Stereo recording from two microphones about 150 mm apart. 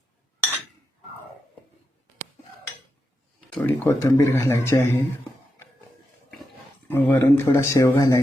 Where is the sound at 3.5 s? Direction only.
15° left (ahead or behind).